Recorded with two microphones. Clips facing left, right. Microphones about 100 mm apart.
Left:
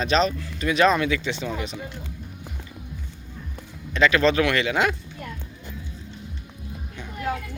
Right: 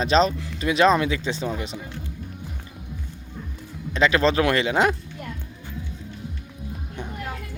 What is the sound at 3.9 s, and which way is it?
Speech, 30° right (ahead or behind).